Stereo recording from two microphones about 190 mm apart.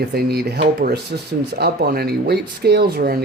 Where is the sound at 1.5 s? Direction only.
55° right (ahead or behind).